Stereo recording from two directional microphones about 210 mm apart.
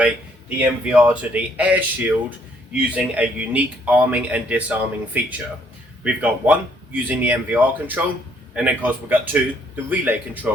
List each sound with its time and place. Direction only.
0.6 s speech: 5° right (ahead or behind)